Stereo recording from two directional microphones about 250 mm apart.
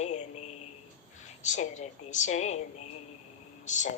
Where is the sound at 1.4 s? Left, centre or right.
Left.